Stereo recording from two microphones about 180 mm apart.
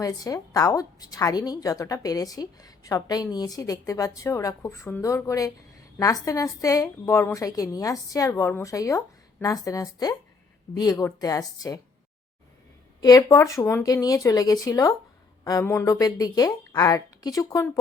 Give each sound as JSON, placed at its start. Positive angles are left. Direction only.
{"t": 0.0, "sound": "a woman's voice", "side_deg": 20}
{"t": 13.0, "sound": "a woman's voice", "side_deg": 20}